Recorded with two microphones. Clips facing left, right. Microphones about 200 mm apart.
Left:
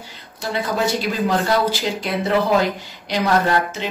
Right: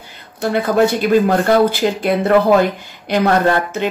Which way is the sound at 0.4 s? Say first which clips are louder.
Right 8 dB; 55° right (ahead or behind).